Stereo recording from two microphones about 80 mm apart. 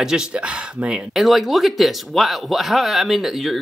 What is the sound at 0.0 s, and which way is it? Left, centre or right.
Speech, centre.